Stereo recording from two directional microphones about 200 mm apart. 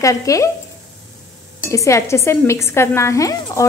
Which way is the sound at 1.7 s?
15° left (ahead or behind).